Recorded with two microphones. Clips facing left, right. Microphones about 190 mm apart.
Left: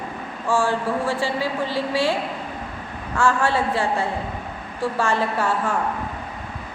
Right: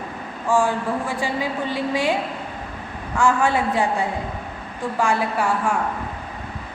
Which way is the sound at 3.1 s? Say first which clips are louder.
Right 1 dB; 15° right (ahead or behind).